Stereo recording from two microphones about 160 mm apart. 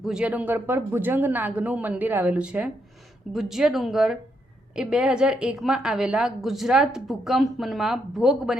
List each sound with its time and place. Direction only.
0.0 s a woman's voice: 5° right (ahead or behind)